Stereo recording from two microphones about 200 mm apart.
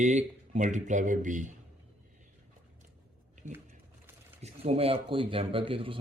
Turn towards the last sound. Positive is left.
turn(degrees=-25)  # may be behind; listen again after turning